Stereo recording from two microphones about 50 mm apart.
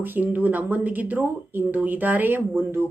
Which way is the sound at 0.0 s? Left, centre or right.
Right.